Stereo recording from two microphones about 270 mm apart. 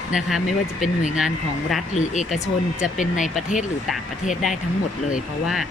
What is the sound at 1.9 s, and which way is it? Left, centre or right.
Speech, left.